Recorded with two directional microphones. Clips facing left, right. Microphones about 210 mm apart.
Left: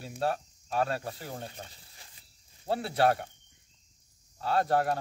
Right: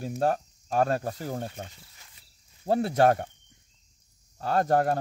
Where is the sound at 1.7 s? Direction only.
35° left (ahead or behind).